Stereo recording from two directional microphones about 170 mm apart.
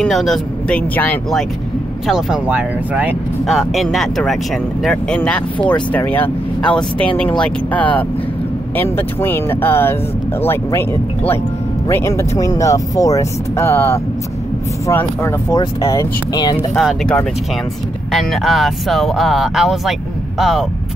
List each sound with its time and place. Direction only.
0.0 s speech: centre (ahead or behind)
2.0 s speech: 5° right (ahead or behind); by 16.5 s 20° left (ahead or behind)
16.7 s speech: centre (ahead or behind)